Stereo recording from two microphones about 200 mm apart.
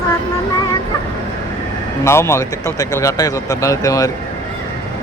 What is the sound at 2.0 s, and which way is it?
Speech, 15° left (ahead or behind).